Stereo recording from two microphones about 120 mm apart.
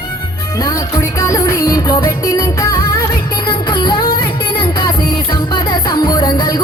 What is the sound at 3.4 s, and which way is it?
Music, 40° left (ahead or behind).